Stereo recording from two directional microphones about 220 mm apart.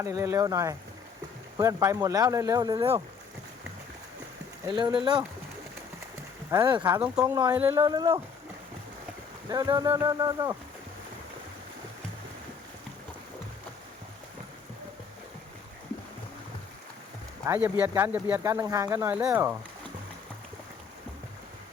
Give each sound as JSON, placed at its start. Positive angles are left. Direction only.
{"t": 0.0, "sound": "speech", "side_deg": -15}
{"t": 4.7, "sound": "speech", "side_deg": -20}
{"t": 6.5, "sound": "speech", "side_deg": -20}
{"t": 7.0, "sound": "speech", "side_deg": -5}
{"t": 9.5, "sound": "speech", "side_deg": -15}
{"t": 17.4, "sound": "speech", "side_deg": -10}